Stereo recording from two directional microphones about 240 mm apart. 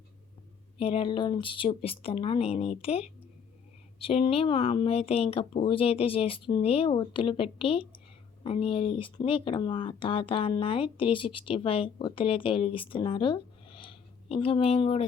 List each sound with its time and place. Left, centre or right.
0.8 s speech: left